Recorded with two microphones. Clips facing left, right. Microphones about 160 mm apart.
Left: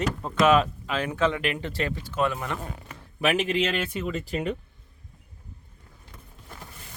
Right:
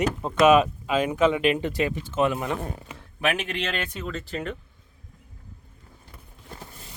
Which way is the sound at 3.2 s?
10° left (ahead or behind).